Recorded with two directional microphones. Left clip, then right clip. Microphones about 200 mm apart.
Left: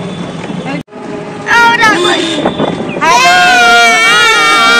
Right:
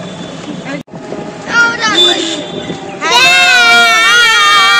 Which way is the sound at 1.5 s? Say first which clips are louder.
Left 4 dB; 10° left (ahead or behind).